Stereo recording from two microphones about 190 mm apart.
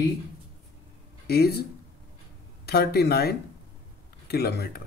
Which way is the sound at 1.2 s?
55° left (ahead or behind).